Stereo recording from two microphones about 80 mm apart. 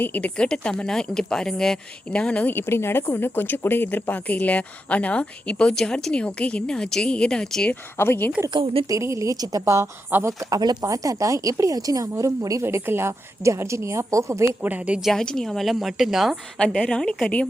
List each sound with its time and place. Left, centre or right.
0.0 s speech: left
0.3 s a woman's voice: centre
7.9 s speech: left
8.9 s speech: right
9.6 s a woman's voice: right
10.6 s speech: right
10.8 s speech: right
12.6 s a woman's voice: right
14.6 s speech: centre
15.0 s a woman's voice: centre
16.6 s a woman's voice: centre